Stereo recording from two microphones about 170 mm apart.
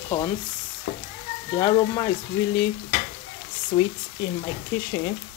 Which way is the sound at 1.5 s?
25° left (ahead or behind).